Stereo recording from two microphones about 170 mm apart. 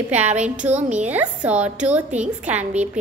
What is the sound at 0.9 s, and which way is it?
A child's voice, 10° right (ahead or behind).